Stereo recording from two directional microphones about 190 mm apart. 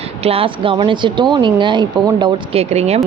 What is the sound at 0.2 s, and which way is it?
A man's voice, 30° right (ahead or behind).